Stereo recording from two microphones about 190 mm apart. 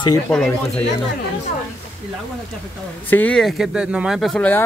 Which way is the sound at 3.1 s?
5° left (ahead or behind).